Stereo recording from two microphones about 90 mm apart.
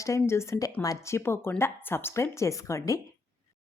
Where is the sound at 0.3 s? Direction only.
30° left (ahead or behind).